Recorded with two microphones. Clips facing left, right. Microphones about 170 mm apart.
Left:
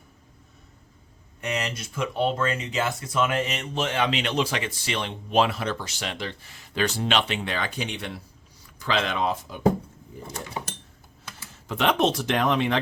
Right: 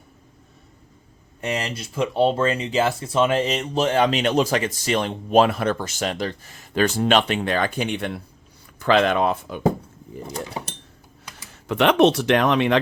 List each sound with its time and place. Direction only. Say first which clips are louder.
1.4 s speech: right 3 dB; 30° right (ahead or behind); by 9.6 s 60° right (ahead or behind)
11.7 s speech: right 6 dB; 70° right (ahead or behind)